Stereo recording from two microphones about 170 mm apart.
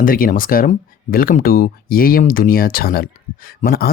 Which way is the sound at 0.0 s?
55° left (ahead or behind).